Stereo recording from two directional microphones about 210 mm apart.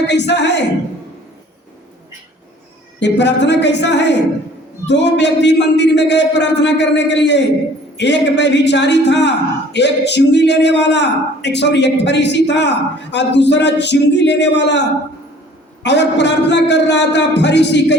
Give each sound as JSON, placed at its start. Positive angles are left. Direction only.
{"t": 0.1, "sound": "speech", "side_deg": 55}
{"t": 3.0, "sound": "speech", "side_deg": 55}
{"t": 15.8, "sound": "speech", "side_deg": 55}